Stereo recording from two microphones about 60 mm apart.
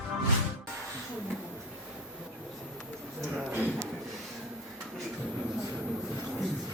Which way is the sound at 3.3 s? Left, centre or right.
Right.